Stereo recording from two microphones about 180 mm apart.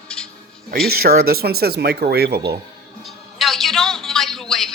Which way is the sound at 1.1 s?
60° right (ahead or behind).